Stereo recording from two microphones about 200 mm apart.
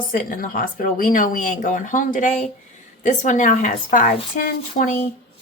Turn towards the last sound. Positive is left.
turn(degrees=40)  # may be behind; listen again after turning